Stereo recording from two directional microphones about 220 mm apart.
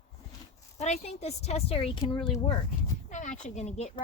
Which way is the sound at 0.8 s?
30° left (ahead or behind).